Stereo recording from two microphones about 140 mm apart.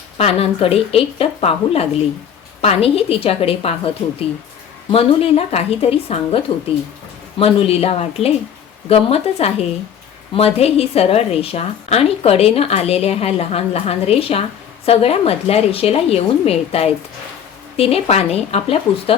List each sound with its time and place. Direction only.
0.2 s a woman's voice: 45° left (ahead or behind)